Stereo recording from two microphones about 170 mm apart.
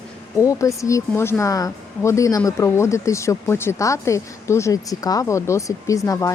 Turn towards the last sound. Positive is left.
turn(degrees=20)  # may be behind; listen again after turning